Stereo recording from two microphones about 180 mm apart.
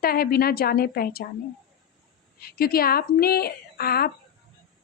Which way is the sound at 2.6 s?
55° left (ahead or behind).